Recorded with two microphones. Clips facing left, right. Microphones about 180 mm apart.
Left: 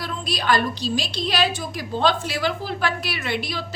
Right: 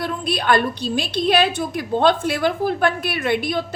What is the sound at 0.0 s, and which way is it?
A woman's voice, 55° right (ahead or behind).